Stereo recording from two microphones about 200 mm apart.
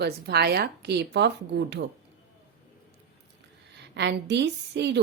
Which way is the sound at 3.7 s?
60° right (ahead or behind).